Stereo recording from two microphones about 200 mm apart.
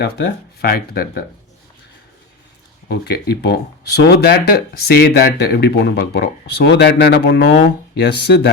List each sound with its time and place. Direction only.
0.0 s speech: 50° left (ahead or behind)
2.9 s speech: 50° left (ahead or behind)